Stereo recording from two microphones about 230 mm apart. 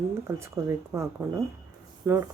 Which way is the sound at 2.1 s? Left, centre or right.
Centre.